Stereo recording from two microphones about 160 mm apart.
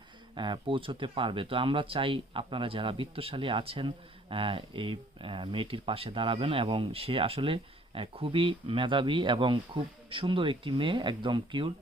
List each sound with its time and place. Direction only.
0.3 s speech: 30° right (ahead or behind)